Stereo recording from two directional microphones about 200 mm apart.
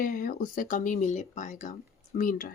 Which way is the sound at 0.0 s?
45° left (ahead or behind).